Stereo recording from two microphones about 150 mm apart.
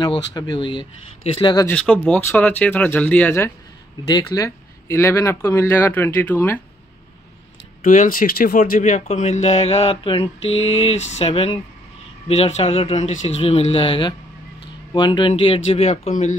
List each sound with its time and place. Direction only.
0.0 s speech: 25° left (ahead or behind)
1.7 s speech: 10° left (ahead or behind)
7.8 s speech: 60° left (ahead or behind)